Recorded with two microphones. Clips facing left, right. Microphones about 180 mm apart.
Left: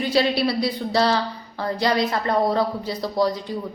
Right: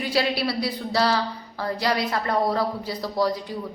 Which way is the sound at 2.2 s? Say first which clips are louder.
Left 2 dB; 25° left (ahead or behind).